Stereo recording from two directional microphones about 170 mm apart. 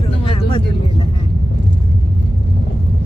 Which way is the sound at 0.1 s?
30° left (ahead or behind).